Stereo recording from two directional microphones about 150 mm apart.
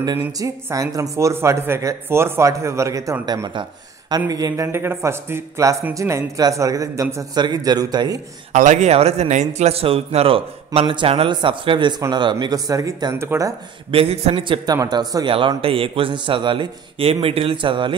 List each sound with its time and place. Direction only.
0.4 s speech: 20° right (ahead or behind)
8.5 s speech: 55° right (ahead or behind); by 13.6 s 20° right (ahead or behind)
13.9 s speech: 40° right (ahead or behind)